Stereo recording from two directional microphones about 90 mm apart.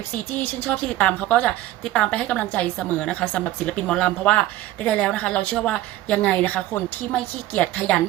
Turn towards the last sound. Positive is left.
turn(degrees=15)  # may be behind; listen again after turning